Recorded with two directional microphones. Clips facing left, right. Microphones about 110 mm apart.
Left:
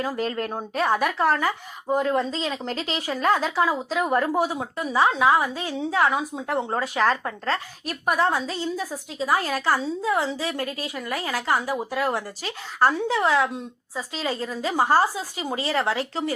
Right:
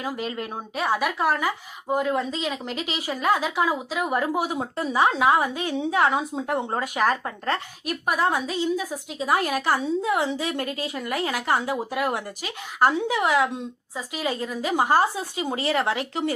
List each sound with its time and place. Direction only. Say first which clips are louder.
0.3 s a woman's voice: left 3 dB; 10° right (ahead or behind)
8.0 s speech: left 1 dB; 5° right (ahead or behind)
8.6 s a woman's voice: right 3 dB; 15° right (ahead or behind)
12.8 s a woman's voice: even; 15° right (ahead or behind)